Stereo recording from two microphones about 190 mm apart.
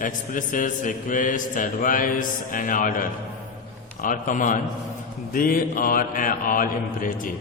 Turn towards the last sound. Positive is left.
turn(degrees=45)  # may be behind; listen again after turning